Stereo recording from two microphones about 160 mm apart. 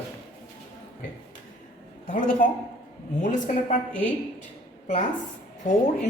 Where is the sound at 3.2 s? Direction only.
50° left (ahead or behind).